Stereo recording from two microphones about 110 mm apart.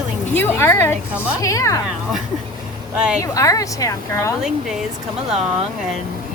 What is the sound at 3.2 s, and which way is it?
A woman's voice, 30° left (ahead or behind).